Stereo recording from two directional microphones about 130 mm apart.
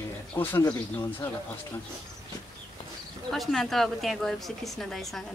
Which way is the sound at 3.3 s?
Centre (ahead or behind).